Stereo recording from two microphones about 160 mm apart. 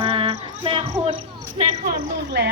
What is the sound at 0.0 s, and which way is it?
Cricket, 35° right (ahead or behind).